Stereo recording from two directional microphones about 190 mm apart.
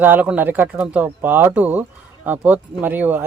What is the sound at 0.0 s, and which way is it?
Speech, 10° right (ahead or behind).